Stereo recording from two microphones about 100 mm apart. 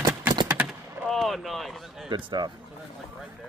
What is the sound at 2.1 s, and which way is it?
Speech, 50° right (ahead or behind).